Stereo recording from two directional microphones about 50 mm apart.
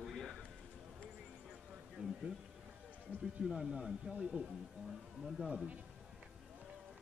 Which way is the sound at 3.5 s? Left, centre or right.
Centre.